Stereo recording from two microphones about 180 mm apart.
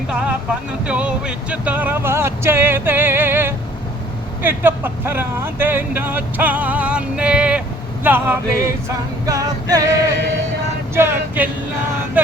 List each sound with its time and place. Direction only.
0.9 s speech: 5° right (ahead or behind)
9.2 s music: 20° right (ahead or behind)
10.9 s speech: 15° right (ahead or behind)